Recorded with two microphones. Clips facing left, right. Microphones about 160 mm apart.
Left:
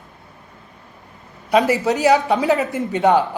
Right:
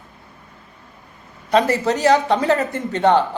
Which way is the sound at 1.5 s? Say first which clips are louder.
Left 1 dB; 15° left (ahead or behind).